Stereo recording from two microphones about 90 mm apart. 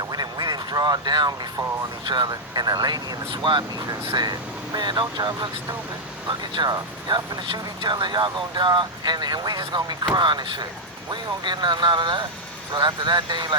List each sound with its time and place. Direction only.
0.0 s quack: 50° right (ahead or behind)
2.0 s speech: 55° right (ahead or behind)